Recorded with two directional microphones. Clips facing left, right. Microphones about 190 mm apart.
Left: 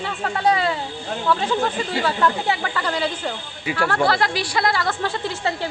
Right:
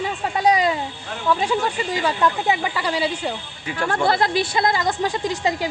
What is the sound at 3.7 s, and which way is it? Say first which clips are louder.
Speech: left 4 dB; 10° left (ahead or behind).